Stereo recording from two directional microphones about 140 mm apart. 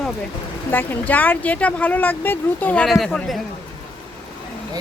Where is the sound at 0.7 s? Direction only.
15° left (ahead or behind).